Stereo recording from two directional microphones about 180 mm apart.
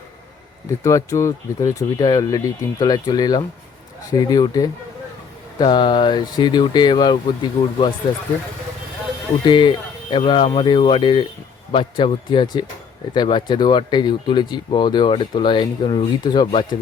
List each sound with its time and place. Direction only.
0.9 s speech: 15° left (ahead or behind)
9.5 s speech: 25° left (ahead or behind)